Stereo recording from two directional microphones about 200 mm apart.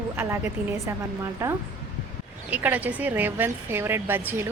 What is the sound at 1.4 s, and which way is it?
A woman's voice, 15° right (ahead or behind).